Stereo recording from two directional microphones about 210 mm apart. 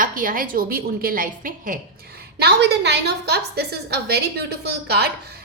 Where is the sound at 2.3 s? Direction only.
50° right (ahead or behind).